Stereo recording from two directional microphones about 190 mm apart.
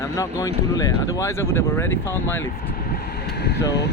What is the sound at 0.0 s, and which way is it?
Speech, 15° left (ahead or behind).